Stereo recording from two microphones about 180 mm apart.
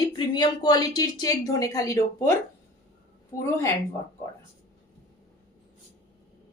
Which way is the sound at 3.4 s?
15° left (ahead or behind).